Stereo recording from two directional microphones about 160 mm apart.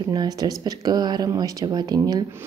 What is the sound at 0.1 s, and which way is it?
Speech, 25° right (ahead or behind).